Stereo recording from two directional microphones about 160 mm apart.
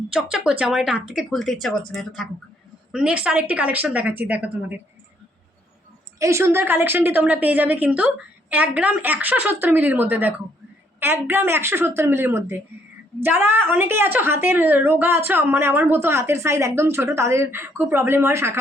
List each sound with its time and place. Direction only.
0.1 s a woman's voice: 5° right (ahead or behind)
6.1 s a woman's voice: 20° right (ahead or behind)